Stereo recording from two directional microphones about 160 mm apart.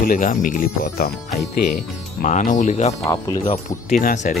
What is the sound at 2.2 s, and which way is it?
Speech, 50° left (ahead or behind).